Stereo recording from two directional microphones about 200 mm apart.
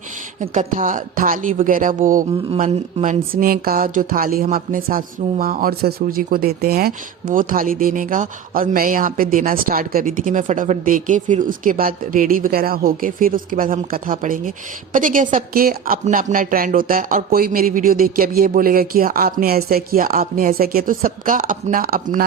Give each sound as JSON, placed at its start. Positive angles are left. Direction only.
{"t": 0.3, "sound": "speech", "side_deg": -35}